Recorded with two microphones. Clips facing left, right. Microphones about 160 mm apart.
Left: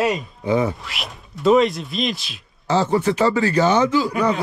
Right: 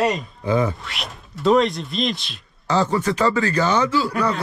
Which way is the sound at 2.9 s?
20° left (ahead or behind).